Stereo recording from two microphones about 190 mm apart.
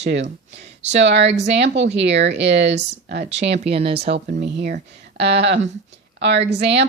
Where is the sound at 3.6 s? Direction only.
30° right (ahead or behind).